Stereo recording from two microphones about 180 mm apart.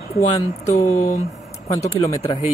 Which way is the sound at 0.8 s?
40° left (ahead or behind).